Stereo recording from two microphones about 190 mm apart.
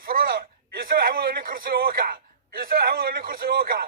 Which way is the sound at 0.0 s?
50° right (ahead or behind).